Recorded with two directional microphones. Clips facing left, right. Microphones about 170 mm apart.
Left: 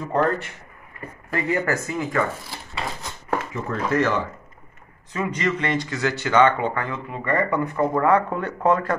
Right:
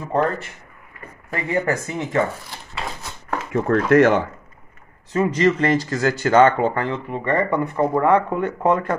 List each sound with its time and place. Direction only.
1.3 s speech: 25° right (ahead or behind)
2.7 s a sound: centre (ahead or behind)
3.5 s speech: 60° right (ahead or behind)
5.1 s speech: 35° right (ahead or behind); by 8.9 s 20° right (ahead or behind)